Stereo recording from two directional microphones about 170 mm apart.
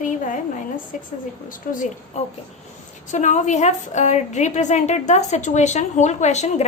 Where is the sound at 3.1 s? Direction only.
45° left (ahead or behind).